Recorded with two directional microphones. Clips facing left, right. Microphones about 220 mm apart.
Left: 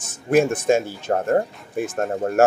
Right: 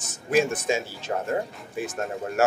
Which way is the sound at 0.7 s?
50° left (ahead or behind).